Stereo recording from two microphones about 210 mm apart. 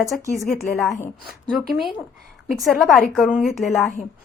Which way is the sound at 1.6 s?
Centre (ahead or behind).